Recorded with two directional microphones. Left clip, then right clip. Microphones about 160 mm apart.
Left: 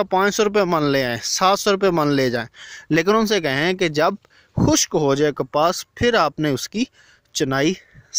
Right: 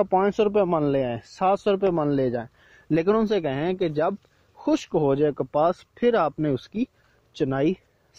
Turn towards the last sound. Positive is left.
turn(degrees=15)  # may be behind; listen again after turning